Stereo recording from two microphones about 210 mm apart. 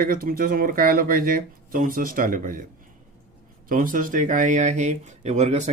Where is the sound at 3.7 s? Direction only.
40° right (ahead or behind).